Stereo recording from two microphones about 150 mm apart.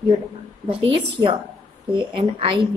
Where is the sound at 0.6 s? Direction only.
35° right (ahead or behind).